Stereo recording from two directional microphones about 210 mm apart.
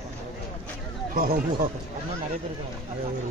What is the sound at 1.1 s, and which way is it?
Speech, 45° right (ahead or behind).